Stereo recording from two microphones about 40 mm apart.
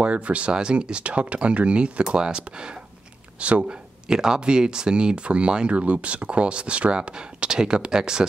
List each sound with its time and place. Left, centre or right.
0.0 s speech: right
4.1 s speech: centre